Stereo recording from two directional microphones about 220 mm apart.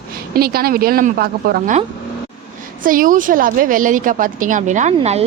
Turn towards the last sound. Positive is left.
turn(degrees=-30)  # may be behind; listen again after turning